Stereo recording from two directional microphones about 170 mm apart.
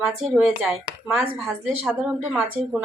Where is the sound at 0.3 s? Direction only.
5° right (ahead or behind).